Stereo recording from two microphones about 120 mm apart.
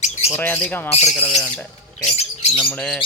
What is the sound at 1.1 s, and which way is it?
Speech, 5° left (ahead or behind).